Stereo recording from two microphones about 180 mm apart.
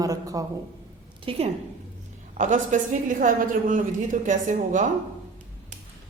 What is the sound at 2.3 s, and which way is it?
A woman's voice, 45° right (ahead or behind).